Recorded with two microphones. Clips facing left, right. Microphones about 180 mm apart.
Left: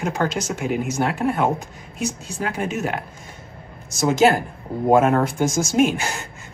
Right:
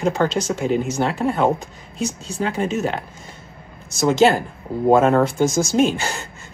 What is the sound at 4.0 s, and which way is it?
Speech, 5° left (ahead or behind).